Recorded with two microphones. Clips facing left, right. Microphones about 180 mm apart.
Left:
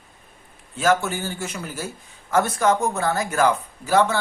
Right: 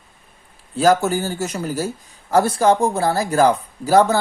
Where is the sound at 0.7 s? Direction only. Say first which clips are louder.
Right 5 dB; 35° right (ahead or behind).